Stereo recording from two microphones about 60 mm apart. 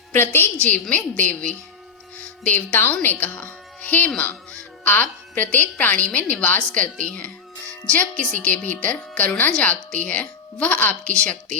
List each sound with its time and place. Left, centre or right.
0.6 s a woman's voice: left